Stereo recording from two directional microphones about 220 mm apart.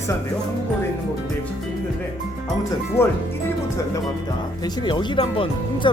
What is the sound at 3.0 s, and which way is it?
Speech, 10° left (ahead or behind).